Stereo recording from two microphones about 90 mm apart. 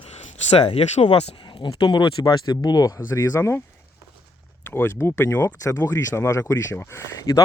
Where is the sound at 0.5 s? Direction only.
90° left; by 3.5 s 35° left (ahead or behind).